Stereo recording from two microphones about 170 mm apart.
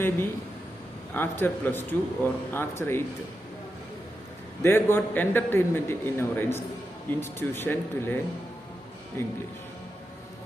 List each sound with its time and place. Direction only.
1.1 s a man's voice: 10° left (ahead or behind)
4.6 s a man's voice: 15° left (ahead or behind)